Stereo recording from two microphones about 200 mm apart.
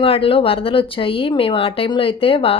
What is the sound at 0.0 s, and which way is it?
Speech, 25° left (ahead or behind).